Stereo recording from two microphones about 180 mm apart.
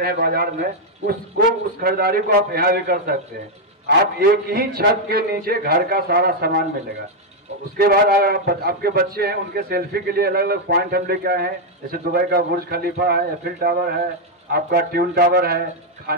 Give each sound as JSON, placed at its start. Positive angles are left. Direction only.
{"t": 0.0, "sound": "speech", "side_deg": -60}
{"t": 7.7, "sound": "speech", "side_deg": -60}